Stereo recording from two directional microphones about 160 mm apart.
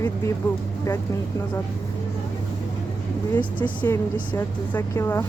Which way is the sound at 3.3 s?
10° left (ahead or behind).